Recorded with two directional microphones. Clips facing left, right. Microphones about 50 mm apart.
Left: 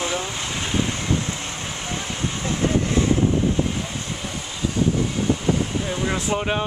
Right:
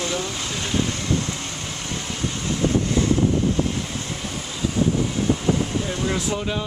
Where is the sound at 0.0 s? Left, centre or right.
Centre.